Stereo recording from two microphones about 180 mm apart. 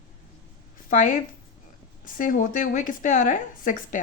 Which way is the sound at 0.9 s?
45° left (ahead or behind).